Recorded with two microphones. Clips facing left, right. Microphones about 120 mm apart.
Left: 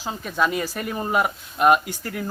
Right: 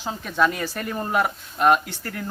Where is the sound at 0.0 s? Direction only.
5° left (ahead or behind).